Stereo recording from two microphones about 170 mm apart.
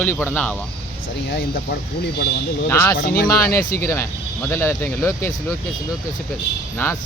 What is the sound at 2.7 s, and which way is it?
Speech, 15° left (ahead or behind).